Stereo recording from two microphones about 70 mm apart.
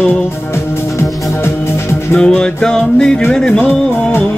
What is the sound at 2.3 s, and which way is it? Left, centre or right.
Music, centre.